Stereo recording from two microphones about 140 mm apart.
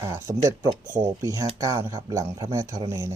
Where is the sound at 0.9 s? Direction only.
60° right (ahead or behind).